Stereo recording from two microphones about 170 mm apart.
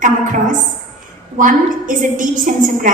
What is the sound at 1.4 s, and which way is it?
Speech, 50° right (ahead or behind).